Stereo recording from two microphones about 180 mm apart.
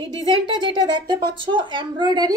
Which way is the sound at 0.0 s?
25° right (ahead or behind).